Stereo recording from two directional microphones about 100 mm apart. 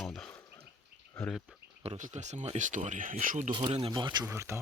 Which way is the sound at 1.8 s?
80° right.